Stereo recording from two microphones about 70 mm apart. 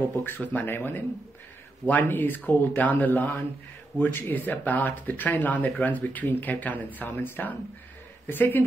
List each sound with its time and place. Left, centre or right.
0.1 s speech: left